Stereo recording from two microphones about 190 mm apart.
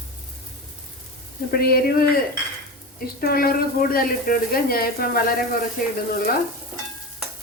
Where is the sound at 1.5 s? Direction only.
50° left (ahead or behind).